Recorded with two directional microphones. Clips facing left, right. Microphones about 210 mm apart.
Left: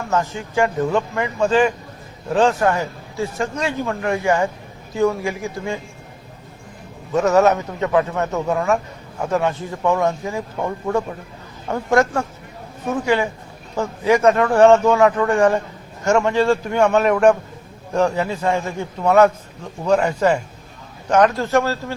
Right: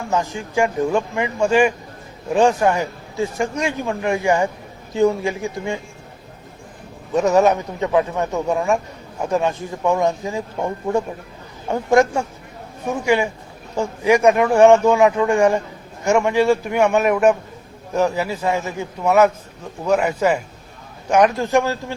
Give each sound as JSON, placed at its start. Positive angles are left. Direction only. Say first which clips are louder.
{"t": 0.1, "sound": "a man's voice", "louder": "even", "side_deg": -15}
{"t": 7.1, "sound": "a man's voice", "louder": "even", "side_deg": -15}